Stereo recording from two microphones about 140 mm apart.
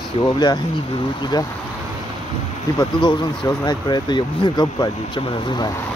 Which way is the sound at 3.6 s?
30° left (ahead or behind).